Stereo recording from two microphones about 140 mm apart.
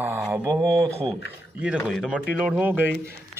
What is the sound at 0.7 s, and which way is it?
Speech, 40° right (ahead or behind).